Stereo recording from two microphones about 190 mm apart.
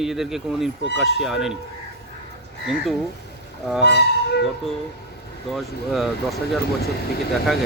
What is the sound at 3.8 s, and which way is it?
Speech, 60° left (ahead or behind).